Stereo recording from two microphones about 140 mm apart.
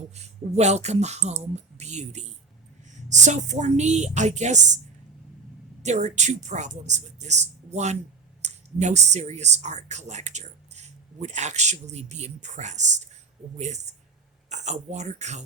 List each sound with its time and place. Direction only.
0.2 s a woman's voice: 50° right (ahead or behind)
5.8 s a woman's voice: 55° right (ahead or behind)